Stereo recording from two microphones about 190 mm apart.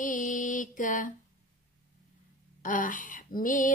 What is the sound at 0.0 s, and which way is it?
Mantra, 45° left (ahead or behind).